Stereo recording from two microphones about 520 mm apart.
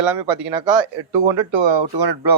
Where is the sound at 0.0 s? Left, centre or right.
Right.